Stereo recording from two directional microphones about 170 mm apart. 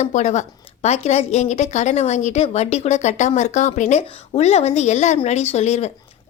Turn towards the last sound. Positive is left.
turn(degrees=40)  # may be behind; listen again after turning